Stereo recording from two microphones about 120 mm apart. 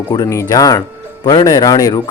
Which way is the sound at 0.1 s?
30° left (ahead or behind).